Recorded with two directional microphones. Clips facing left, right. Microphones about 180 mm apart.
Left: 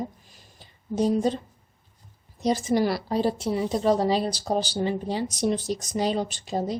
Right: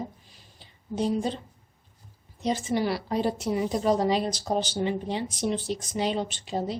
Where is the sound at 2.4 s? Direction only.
40° left (ahead or behind).